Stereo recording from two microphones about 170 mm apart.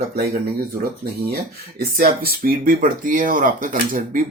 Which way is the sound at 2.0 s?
60° right (ahead or behind).